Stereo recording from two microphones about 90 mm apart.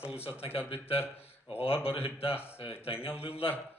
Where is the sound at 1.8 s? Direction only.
85° left.